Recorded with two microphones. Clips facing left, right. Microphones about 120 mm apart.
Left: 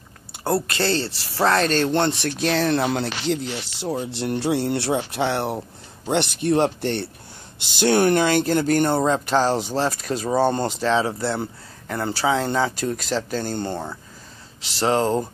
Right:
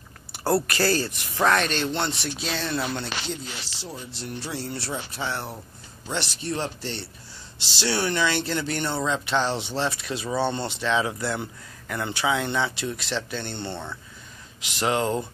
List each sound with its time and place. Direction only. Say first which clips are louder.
0.3 s speech: even; 20° left (ahead or behind); by 2.8 s 80° left
2.9 s music: left 7 dB; 85° left; by 5.6 s 65° left (ahead or behind)
6.0 s music: left 9 dB; 55° left (ahead or behind)
7.5 s speech: left 8 dB; 50° left (ahead or behind); by 15.2 s 35° left (ahead or behind)